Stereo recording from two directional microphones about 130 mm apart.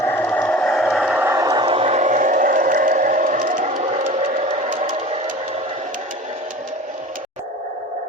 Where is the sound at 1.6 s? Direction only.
45° right (ahead or behind); by 4.9 s 75° right (ahead or behind).